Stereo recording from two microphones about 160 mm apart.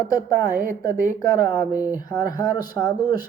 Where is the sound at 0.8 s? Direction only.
25° left (ahead or behind).